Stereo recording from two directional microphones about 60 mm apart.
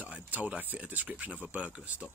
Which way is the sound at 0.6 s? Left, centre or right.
Right.